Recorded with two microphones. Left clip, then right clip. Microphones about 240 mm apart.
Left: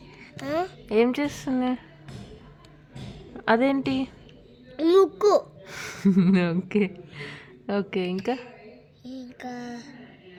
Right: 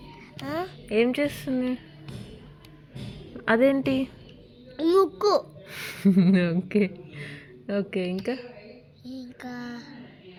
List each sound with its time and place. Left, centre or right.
0.2 s music: left
0.9 s a woman's voice: centre
3.3 s a woman's voice: centre
4.8 s speech: left
5.6 s a woman's voice: left
9.0 s a sound: left